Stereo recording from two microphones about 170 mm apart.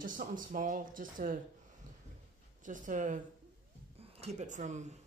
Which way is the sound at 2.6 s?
50° right (ahead or behind).